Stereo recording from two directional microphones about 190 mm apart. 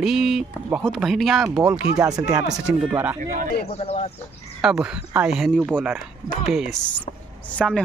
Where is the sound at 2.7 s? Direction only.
5° right (ahead or behind).